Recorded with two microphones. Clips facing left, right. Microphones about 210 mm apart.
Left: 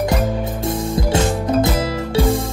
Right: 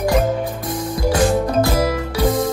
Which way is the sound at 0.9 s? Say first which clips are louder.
Right 5 dB; 25° left (ahead or behind).